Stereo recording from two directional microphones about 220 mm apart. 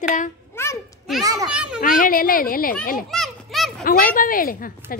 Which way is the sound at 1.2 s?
15° right (ahead or behind).